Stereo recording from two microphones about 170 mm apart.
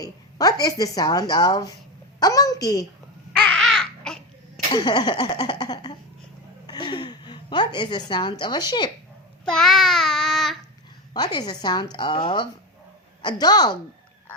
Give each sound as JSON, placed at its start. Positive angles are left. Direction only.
{"t": 0.0, "sound": "a woman's voice", "side_deg": 20}
{"t": 3.3, "sound": "baby laughter", "side_deg": 5}
{"t": 4.7, "sound": "a woman's voice", "side_deg": 25}
{"t": 9.5, "sound": "child singing", "side_deg": 0}
{"t": 11.1, "sound": "a woman's voice", "side_deg": 25}